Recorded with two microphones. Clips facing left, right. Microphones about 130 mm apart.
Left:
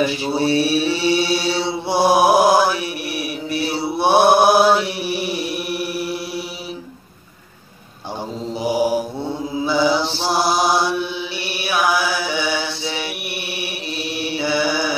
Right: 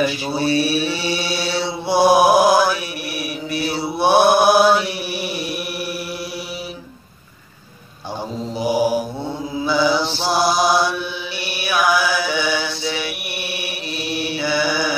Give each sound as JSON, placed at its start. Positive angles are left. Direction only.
{"t": 0.0, "sound": "mantra", "side_deg": 25}
{"t": 8.5, "sound": "mantra", "side_deg": 25}